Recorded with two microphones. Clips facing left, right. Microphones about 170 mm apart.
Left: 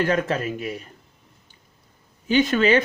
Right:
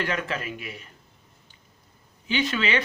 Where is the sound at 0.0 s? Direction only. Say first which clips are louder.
Left 7 dB; 40° left (ahead or behind).